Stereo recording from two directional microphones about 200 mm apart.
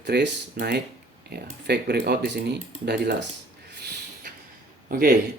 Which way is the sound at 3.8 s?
55° right (ahead or behind).